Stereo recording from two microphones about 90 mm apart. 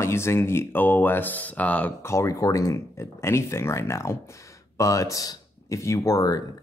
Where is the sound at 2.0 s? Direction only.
35° left (ahead or behind).